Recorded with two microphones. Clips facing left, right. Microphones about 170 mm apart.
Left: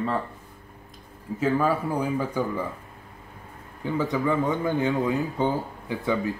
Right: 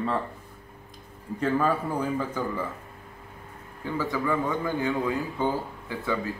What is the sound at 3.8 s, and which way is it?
A man's voice, 20° left (ahead or behind).